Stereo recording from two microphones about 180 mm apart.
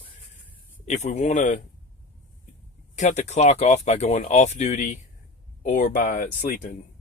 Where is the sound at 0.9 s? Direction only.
40° left (ahead or behind).